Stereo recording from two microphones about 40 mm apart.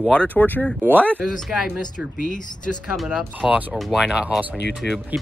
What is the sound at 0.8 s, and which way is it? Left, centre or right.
Speech, right.